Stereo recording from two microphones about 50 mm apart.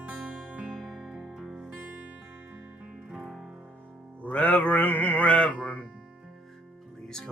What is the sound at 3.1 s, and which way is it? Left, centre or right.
Music, centre.